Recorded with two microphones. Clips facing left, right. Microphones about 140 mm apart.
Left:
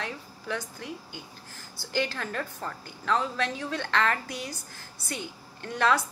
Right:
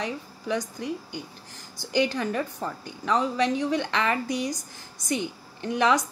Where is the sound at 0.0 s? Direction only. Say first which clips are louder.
Right 5 dB; 15° right (ahead or behind).